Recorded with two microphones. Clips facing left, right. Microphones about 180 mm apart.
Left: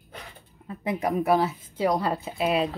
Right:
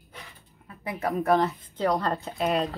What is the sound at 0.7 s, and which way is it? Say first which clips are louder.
Speech: left 3 dB; 20° left (ahead or behind).